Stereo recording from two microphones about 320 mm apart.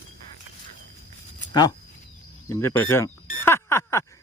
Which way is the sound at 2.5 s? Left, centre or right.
Centre.